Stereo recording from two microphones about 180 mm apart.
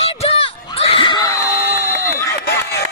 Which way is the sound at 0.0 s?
35° left (ahead or behind).